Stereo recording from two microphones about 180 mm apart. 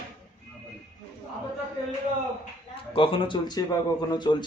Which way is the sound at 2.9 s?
30° left (ahead or behind).